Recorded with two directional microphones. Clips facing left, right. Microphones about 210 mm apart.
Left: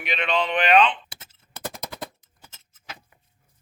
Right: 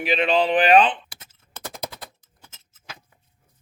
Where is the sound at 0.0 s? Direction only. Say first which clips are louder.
Right 5 dB; 35° right (ahead or behind).